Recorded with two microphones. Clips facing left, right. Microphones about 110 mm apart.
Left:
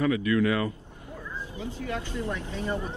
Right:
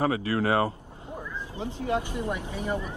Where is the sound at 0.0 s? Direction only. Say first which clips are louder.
Left 2 dB; 35° right (ahead or behind).